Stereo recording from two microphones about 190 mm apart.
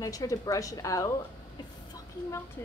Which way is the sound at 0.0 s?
15° left (ahead or behind).